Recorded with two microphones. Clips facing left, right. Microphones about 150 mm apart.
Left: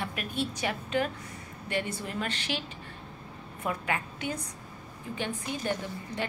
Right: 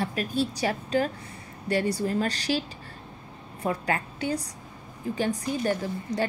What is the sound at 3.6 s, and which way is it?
A woman's voice, 35° right (ahead or behind).